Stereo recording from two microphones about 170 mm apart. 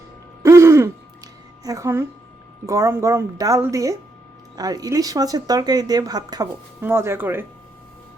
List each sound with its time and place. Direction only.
0.4 s throat clearing: 15° right (ahead or behind)
2.6 s speech: 15° right (ahead or behind)